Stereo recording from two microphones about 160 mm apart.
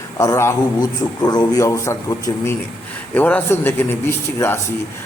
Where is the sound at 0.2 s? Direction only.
20° left (ahead or behind).